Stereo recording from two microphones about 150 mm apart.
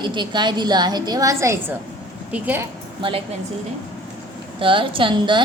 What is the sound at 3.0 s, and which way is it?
Speech, 35° right (ahead or behind).